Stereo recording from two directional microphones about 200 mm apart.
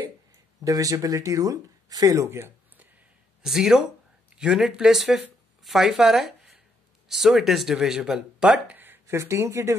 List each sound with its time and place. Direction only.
0.7 s speech: 15° right (ahead or behind)